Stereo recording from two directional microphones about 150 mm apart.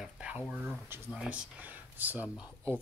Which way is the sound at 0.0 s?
5° right (ahead or behind).